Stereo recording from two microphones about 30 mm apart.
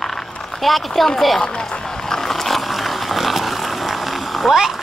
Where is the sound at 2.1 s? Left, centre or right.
Centre.